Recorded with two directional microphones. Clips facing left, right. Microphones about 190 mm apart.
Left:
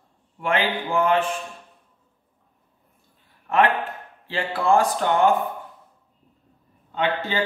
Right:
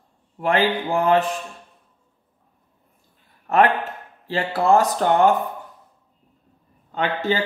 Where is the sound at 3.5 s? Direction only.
40° right (ahead or behind).